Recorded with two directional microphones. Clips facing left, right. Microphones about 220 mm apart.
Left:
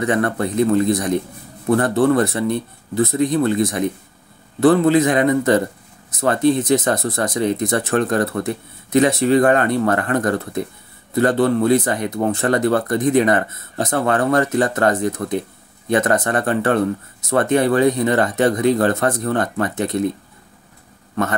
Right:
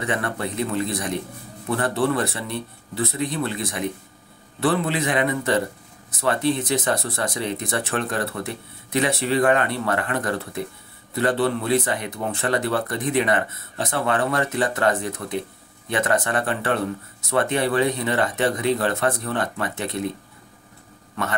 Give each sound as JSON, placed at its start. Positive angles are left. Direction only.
{"t": 0.0, "sound": "speech", "side_deg": 40}